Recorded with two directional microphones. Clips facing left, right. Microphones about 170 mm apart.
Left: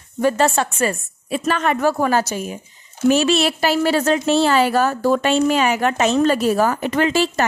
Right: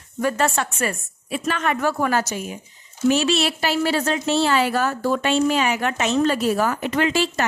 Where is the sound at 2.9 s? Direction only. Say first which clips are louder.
Left 3 dB; 50° left (ahead or behind).